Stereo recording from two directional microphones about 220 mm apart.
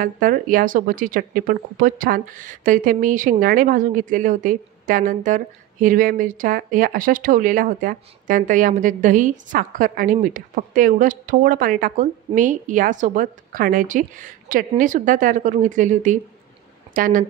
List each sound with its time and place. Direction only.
0.0 s speech: 40° right (ahead or behind)